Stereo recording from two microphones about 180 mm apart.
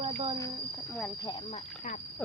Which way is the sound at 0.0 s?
30° right (ahead or behind).